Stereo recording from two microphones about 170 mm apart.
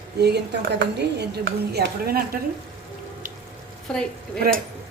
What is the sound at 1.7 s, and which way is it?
Speech, 65° right (ahead or behind).